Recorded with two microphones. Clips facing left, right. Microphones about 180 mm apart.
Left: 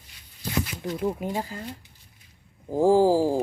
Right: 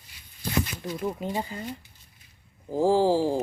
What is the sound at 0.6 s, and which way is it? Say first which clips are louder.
Speech: left 3 dB; 5° left (ahead or behind).